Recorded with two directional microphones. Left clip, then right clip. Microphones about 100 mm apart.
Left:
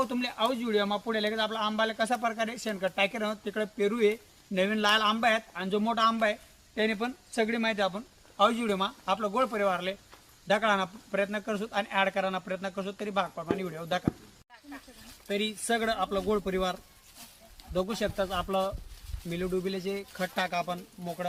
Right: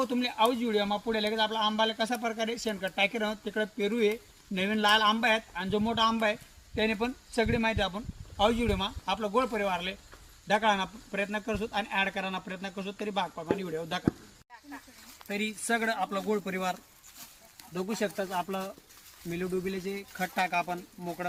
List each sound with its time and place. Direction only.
0.1 s speech: 20° left (ahead or behind)
15.3 s speech: 25° left (ahead or behind)
18.0 s speech: 25° left (ahead or behind)